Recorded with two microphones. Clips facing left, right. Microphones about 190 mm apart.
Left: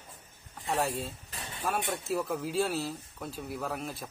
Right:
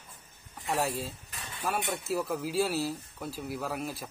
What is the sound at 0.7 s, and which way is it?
Speech, centre (ahead or behind).